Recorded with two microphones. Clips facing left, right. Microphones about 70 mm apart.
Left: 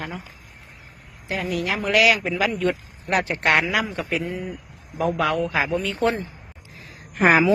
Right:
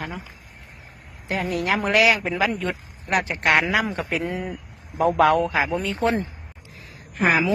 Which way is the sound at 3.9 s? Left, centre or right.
Right.